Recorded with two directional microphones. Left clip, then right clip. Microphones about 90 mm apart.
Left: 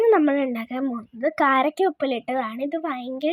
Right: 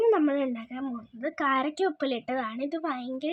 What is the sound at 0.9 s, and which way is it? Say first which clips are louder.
Speech: left 11 dB; 85° left.